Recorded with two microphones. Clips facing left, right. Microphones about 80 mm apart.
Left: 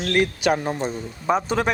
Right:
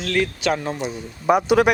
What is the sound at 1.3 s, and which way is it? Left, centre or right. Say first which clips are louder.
Speech: right 5 dB; centre.